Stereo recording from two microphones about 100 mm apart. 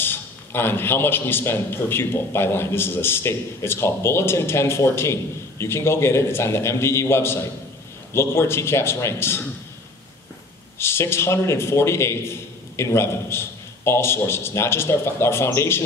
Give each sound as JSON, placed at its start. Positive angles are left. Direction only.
{"t": 0.0, "sound": "a man's voice", "side_deg": 20}
{"t": 10.8, "sound": "a man's voice", "side_deg": 25}